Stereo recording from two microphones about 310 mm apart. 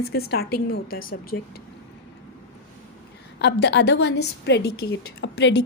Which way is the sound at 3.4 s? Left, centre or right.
Left.